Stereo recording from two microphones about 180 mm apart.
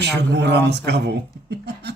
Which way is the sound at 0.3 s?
70° right (ahead or behind).